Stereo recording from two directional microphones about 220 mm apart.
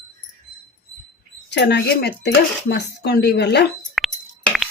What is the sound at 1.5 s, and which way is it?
Speech, 50° left (ahead or behind).